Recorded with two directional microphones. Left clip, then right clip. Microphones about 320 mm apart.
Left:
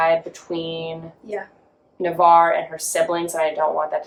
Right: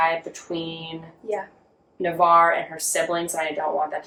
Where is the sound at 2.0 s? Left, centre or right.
Centre.